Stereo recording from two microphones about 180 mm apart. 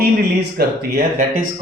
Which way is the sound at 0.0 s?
60° right (ahead or behind).